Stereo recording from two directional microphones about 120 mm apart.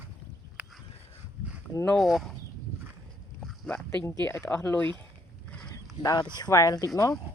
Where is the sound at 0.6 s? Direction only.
15° right (ahead or behind).